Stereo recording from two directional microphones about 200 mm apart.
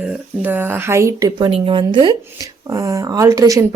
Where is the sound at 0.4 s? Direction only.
10° right (ahead or behind).